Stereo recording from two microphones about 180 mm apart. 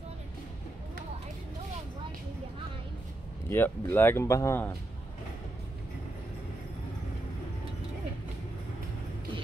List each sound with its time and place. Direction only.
3.4 s speech: 10° left (ahead or behind)